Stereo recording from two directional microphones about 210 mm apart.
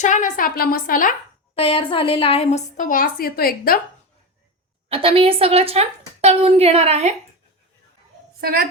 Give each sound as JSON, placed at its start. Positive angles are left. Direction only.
{"t": 0.0, "sound": "a woman's voice", "side_deg": 35}
{"t": 1.5, "sound": "a woman's voice", "side_deg": 25}
{"t": 4.9, "sound": "a woman's voice", "side_deg": -25}
{"t": 8.4, "sound": "a child's voice", "side_deg": -45}